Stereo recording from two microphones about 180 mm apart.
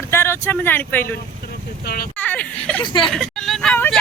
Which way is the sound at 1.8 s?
60° left (ahead or behind).